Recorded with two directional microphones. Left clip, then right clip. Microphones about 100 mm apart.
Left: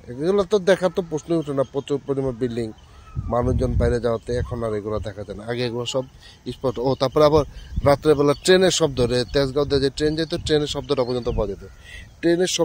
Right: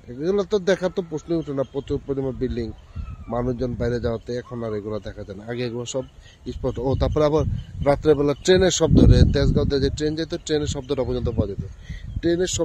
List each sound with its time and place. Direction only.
0.2 s speech: 20° right (ahead or behind)